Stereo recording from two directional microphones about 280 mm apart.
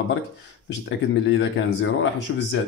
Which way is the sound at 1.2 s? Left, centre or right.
Left.